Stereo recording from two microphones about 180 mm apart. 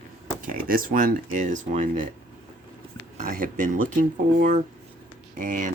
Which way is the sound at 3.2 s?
45° right (ahead or behind).